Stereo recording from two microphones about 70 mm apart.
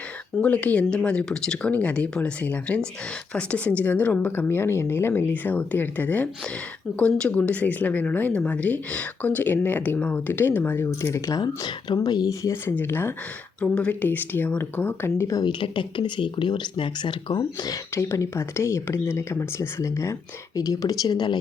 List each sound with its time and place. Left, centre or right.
0.4 s speech: left
4.3 s speech: left
11.0 s speech: left
11.3 s speech: left
12.3 s speech: left
12.6 s speech: left
13.6 s speech: centre
14.0 s speech: left
16.0 s speech: left
17.9 s speech: left
20.6 s speech: left